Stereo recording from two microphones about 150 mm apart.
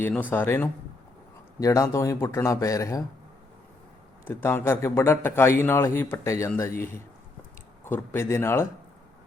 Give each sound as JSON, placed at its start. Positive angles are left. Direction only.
{"t": 0.0, "sound": "a man's voice", "side_deg": 10}
{"t": 4.3, "sound": "a man's voice", "side_deg": 15}
{"t": 7.9, "sound": "a man's voice", "side_deg": 15}